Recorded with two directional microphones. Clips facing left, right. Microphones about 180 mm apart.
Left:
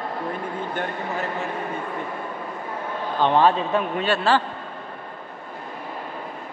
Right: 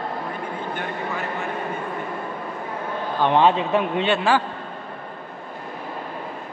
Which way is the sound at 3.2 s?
15° right (ahead or behind).